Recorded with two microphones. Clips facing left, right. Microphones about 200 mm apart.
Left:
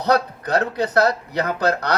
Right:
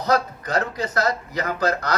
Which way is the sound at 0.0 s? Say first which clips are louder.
Left 2 dB; 65° left (ahead or behind).